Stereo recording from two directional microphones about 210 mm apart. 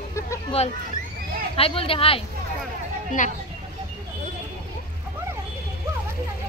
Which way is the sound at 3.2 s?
40° left (ahead or behind).